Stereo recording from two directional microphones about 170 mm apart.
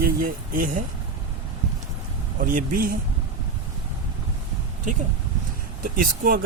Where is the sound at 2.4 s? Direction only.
55° right (ahead or behind).